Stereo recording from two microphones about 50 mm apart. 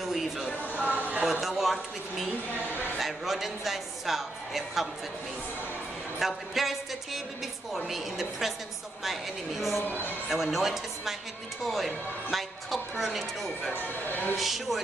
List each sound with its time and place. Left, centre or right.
0.0 s a sound: centre
0.7 s a sound: right
1.4 s a woman's voice: centre
6.1 s a woman's voice: centre
9.8 s speech: left
10.3 s a woman's voice: centre
13.7 s speech: left
14.3 s a woman's voice: centre